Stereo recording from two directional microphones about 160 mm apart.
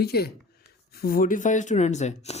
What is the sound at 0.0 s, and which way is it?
Speech, 80° left.